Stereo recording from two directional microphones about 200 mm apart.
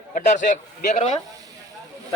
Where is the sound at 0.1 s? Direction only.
40° left (ahead or behind).